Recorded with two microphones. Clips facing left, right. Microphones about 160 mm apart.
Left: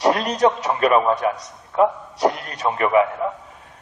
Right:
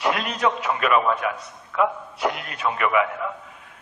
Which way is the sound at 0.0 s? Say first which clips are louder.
Left 6 dB; 40° left (ahead or behind).